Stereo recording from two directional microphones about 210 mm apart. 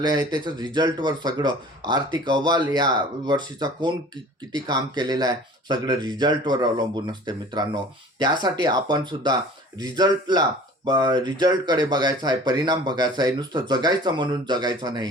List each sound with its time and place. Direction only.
0.0 s speech: 20° right (ahead or behind)